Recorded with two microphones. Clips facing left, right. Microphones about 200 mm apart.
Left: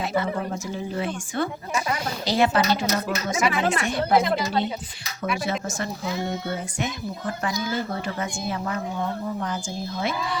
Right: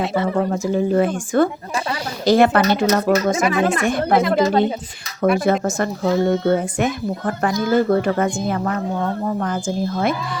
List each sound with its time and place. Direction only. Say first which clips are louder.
0.7 s speech: right 11 dB; 50° right (ahead or behind)